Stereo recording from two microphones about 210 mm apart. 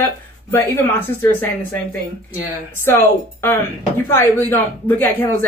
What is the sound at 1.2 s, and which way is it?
Speech, 10° left (ahead or behind).